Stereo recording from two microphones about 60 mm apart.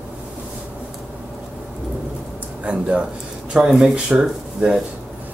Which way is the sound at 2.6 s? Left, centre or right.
Centre.